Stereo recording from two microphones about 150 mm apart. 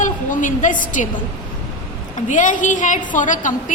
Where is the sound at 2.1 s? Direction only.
55° left (ahead or behind).